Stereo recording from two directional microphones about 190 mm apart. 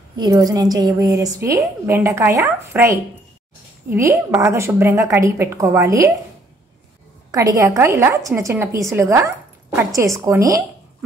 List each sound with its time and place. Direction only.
0.2 s a woman's voice: 20° right (ahead or behind)
7.2 s a woman's voice: 20° right (ahead or behind)